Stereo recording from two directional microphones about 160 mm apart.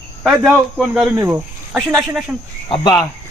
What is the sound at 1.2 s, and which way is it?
Speech, 15° right (ahead or behind).